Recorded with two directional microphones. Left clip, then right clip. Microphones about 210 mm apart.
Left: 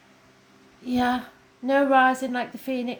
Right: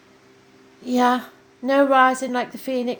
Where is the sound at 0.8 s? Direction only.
40° right (ahead or behind).